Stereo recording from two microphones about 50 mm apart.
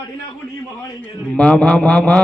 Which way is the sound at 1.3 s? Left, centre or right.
Centre.